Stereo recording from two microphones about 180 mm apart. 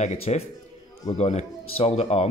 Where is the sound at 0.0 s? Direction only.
35° left (ahead or behind).